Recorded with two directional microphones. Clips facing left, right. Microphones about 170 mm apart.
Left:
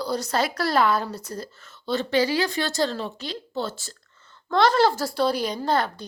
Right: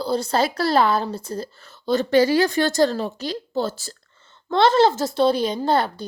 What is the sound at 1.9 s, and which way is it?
Speech, 45° right (ahead or behind).